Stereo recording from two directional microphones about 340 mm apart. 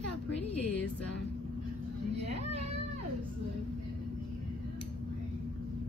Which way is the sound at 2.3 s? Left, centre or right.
Centre.